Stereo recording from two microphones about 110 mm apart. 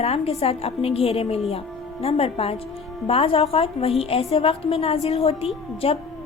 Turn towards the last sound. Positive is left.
turn(degrees=65)  # may be behind; listen again after turning